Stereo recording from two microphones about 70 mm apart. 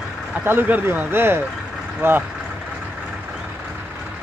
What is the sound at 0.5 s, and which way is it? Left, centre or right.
Speech, right.